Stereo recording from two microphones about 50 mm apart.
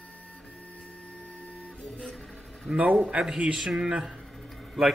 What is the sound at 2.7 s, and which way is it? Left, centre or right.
Speech, centre.